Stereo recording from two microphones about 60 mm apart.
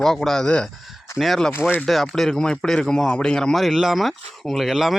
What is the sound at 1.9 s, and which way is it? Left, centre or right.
Speech, centre.